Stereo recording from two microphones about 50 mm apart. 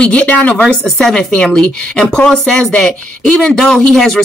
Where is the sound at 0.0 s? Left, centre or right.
Left.